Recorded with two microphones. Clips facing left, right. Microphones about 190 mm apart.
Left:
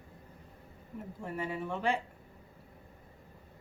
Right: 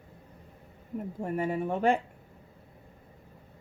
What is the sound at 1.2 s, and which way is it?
Speech, 50° right (ahead or behind).